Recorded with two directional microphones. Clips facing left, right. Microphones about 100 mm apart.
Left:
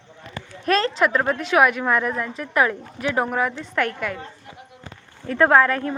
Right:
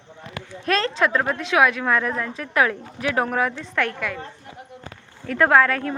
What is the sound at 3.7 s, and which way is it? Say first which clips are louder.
Speech: left 1 dB; 25° left (ahead or behind).